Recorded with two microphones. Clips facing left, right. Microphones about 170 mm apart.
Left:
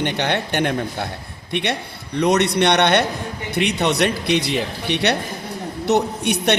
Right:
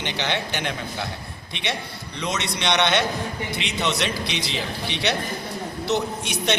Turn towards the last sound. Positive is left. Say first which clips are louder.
# left 5 dB
turn(degrees=60)  # may be behind; listen again after turning